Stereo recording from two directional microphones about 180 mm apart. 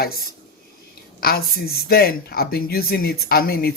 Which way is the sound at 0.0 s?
55° left (ahead or behind).